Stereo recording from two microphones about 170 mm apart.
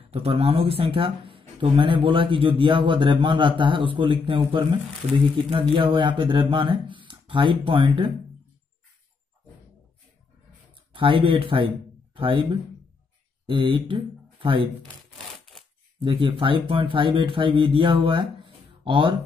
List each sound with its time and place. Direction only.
0.1 s speech: 35° right (ahead or behind)
10.9 s speech: 30° right (ahead or behind)
16.0 s speech: 30° right (ahead or behind)